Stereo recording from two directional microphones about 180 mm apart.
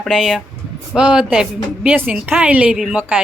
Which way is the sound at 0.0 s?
Centre (ahead or behind).